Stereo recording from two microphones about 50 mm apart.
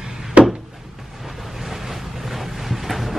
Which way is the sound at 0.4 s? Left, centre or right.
Right.